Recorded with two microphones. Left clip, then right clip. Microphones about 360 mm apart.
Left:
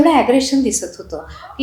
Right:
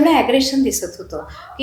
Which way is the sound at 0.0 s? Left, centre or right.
Left.